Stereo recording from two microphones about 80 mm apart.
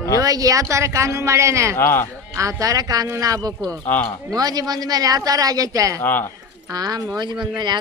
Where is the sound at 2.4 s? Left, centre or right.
Right.